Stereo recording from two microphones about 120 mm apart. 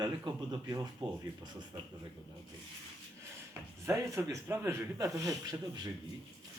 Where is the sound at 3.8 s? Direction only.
25° right (ahead or behind).